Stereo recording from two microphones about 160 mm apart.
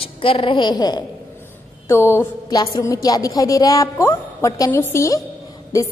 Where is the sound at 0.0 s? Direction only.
35° left (ahead or behind).